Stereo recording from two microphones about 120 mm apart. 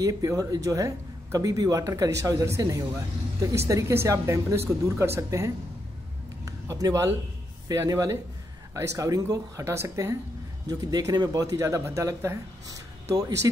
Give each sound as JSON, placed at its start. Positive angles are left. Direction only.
{"t": 0.0, "sound": "a man's voice", "side_deg": -30}